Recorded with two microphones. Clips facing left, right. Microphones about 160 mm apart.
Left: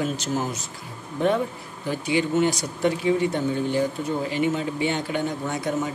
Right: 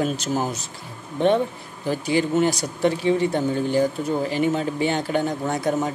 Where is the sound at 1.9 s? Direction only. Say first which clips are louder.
Right 2 dB; 40° right (ahead or behind).